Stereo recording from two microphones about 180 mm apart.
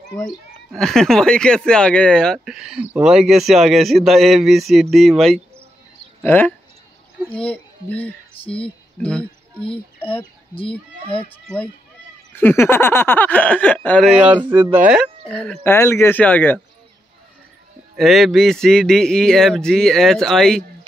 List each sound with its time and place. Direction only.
0.2 s speech: centre (ahead or behind)
8.5 s a sound: 5° left (ahead or behind)
9.7 s speech: 10° left (ahead or behind)
11.1 s speech: 30° left (ahead or behind)
11.4 s speech: 5° left (ahead or behind)
14.3 s speech: 30° right (ahead or behind)
15.2 s speech: 5° left (ahead or behind)
17.9 s speech: centre (ahead or behind)